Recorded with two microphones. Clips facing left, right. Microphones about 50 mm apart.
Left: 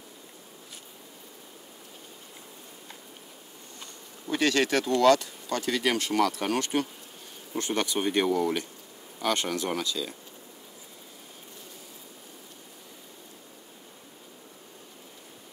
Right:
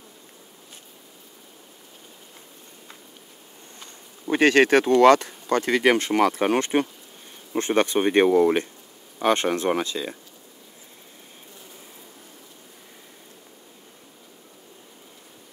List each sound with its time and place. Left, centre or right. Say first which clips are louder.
4.3 s speech: right 8 dB; right